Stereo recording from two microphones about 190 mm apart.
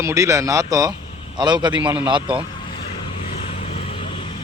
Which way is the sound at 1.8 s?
10° right (ahead or behind).